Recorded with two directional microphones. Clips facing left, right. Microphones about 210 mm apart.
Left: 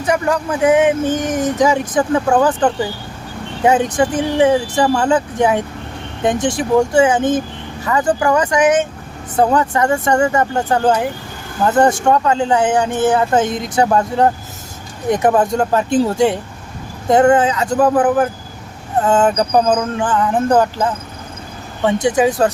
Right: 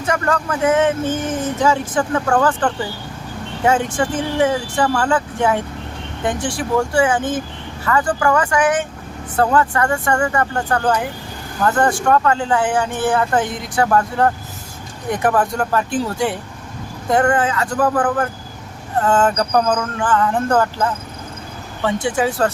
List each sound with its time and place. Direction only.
0.0 s speech: 15° left (ahead or behind)
22.0 s speech: 20° left (ahead or behind)